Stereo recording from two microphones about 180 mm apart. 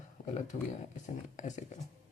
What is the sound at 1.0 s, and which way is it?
Speech, 40° left (ahead or behind).